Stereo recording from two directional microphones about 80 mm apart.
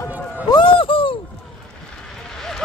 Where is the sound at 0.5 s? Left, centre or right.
Left.